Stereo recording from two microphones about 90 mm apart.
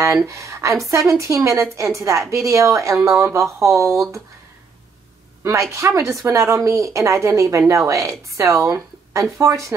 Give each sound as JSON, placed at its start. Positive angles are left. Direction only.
{"t": 0.0, "sound": "speech", "side_deg": -35}
{"t": 5.4, "sound": "speech", "side_deg": -35}